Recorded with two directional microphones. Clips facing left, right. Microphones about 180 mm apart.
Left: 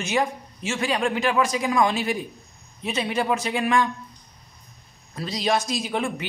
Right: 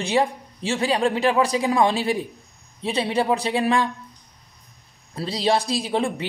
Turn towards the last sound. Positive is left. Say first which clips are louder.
# right 3 dB
turn(degrees=-30)  # may be behind; listen again after turning